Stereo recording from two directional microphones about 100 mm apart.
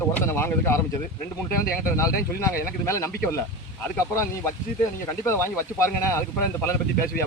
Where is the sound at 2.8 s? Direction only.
30° left (ahead or behind).